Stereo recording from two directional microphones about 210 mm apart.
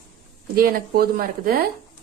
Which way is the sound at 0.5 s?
45° right (ahead or behind).